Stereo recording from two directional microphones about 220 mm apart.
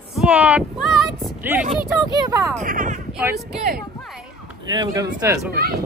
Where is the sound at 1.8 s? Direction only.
15° right (ahead or behind).